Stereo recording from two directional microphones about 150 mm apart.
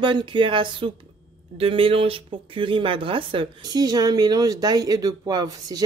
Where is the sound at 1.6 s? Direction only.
40° right (ahead or behind).